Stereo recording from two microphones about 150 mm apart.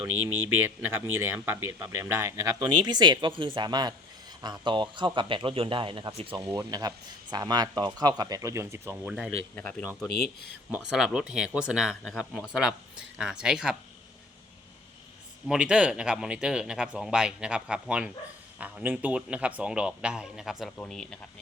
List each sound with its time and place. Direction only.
0.0 s speech: 15° right (ahead or behind); by 6.5 s 35° right (ahead or behind)
6.7 s speech: 25° right (ahead or behind)
9.6 s speech: 5° left (ahead or behind)
10.7 s speech: 10° right (ahead or behind)
15.4 s a man's voice: 5° right (ahead or behind)